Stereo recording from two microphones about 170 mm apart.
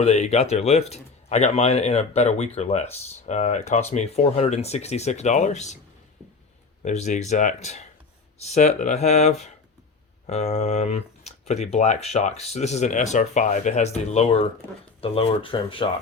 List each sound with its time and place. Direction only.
0.0 s speech: 40° left (ahead or behind)
6.8 s speech: 45° left (ahead or behind)